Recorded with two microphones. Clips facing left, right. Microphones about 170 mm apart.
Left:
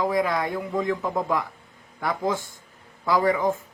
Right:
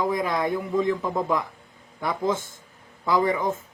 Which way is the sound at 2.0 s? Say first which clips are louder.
Even; 20° right (ahead or behind).